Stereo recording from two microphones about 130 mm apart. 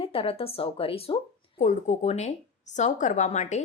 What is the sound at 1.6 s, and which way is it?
A woman's voice, 65° left (ahead or behind).